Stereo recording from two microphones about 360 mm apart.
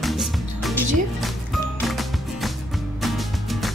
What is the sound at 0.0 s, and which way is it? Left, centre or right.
Music, centre.